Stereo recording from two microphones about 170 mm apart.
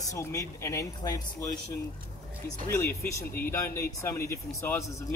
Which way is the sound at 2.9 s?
15° left (ahead or behind).